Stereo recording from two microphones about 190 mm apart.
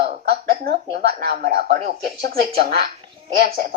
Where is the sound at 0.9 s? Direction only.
40° right (ahead or behind).